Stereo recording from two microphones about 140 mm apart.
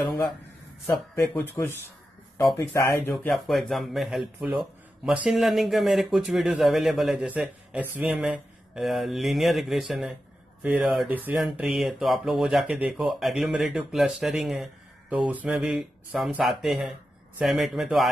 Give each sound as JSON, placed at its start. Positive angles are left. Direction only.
{"t": 1.1, "sound": "speech", "side_deg": 15}
{"t": 3.3, "sound": "speech", "side_deg": 0}
{"t": 7.2, "sound": "speech", "side_deg": -10}
{"t": 8.7, "sound": "speech", "side_deg": 0}